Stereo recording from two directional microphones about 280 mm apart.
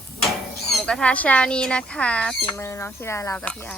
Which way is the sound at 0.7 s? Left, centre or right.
Centre.